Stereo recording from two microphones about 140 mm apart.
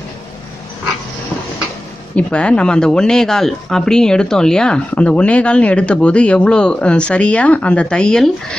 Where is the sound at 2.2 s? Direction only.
10° left (ahead or behind).